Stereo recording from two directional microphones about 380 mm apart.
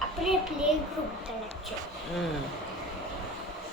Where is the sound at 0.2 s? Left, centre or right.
Centre.